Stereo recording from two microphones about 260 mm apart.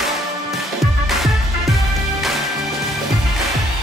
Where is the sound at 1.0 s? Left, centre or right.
Centre.